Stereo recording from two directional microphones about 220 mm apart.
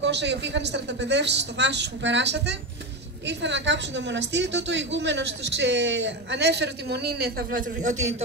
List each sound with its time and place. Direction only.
0.0 s a woman's voice: 50° right (ahead or behind)